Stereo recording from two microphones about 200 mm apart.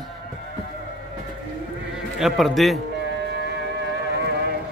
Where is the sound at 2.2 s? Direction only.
Centre (ahead or behind).